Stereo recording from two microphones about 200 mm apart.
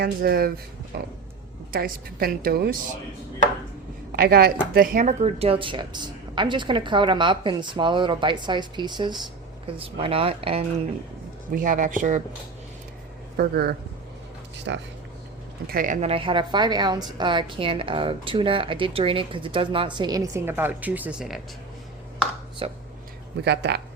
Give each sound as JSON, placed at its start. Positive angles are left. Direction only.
{"t": 0.0, "sound": "a woman's voice", "side_deg": -50}
{"t": 4.1, "sound": "a woman's voice", "side_deg": -50}
{"t": 11.5, "sound": "speech", "side_deg": -40}
{"t": 13.3, "sound": "a woman's voice", "side_deg": -50}
{"t": 14.7, "sound": "speech", "side_deg": -60}
{"t": 15.6, "sound": "a woman's voice", "side_deg": -45}
{"t": 22.6, "sound": "a woman's voice", "side_deg": -30}
{"t": 23.4, "sound": "speech", "side_deg": -55}